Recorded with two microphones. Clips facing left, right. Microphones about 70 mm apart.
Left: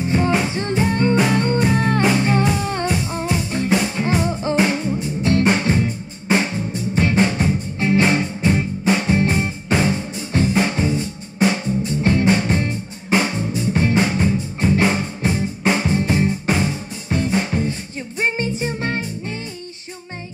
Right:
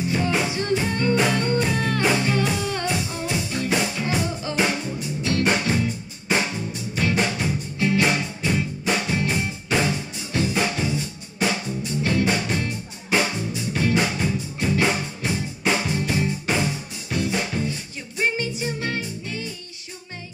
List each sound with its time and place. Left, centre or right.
0.0 s music: left